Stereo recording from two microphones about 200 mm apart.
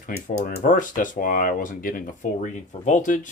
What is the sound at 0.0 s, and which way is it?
Speech, 40° left (ahead or behind).